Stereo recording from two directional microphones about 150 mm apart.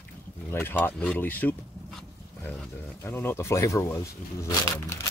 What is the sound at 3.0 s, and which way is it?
Speech, 20° left (ahead or behind).